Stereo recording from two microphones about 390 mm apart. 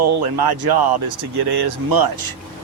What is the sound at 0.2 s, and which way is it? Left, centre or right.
Speech, right.